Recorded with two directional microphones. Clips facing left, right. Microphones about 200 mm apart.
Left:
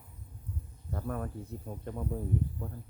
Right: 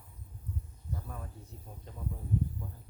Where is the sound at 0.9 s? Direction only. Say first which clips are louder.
Left 8 dB; 60° left (ahead or behind).